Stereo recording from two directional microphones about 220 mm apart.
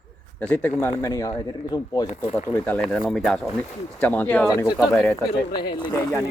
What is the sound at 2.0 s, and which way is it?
Speech, 30° left (ahead or behind).